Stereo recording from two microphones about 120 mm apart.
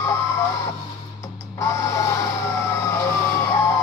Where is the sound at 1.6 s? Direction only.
25° left (ahead or behind).